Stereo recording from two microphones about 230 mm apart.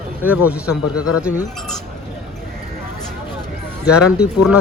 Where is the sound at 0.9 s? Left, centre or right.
Left.